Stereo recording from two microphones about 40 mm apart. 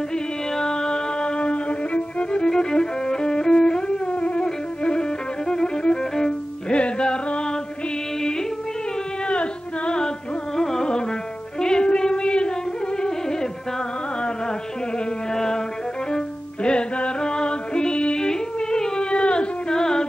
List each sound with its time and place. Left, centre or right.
0.1 s music: centre
5.5 s violin: centre
6.7 s music: left
9.3 s music: left
15.3 s music: centre
16.6 s music: left